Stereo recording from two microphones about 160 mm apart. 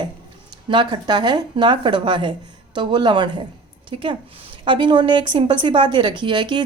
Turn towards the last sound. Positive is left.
turn(degrees=-30)  # may be behind; listen again after turning